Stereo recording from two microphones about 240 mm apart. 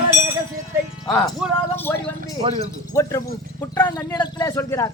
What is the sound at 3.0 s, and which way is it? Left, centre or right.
Speech, centre.